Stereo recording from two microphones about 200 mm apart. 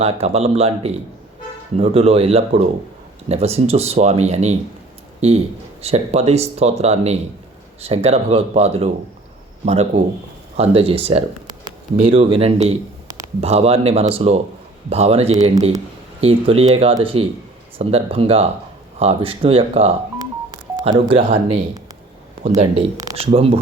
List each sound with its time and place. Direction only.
0.0 s speech: 30° right (ahead or behind)